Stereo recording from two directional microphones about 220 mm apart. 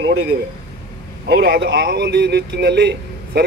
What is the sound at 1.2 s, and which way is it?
A man's voice, 50° right (ahead or behind).